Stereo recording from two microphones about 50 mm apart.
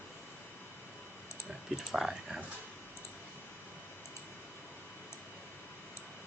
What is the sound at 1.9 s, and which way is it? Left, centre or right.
Speech, centre.